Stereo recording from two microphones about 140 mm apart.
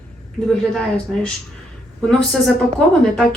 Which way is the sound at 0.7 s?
5° left (ahead or behind).